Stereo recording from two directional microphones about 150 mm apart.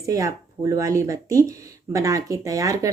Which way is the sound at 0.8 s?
20° right (ahead or behind).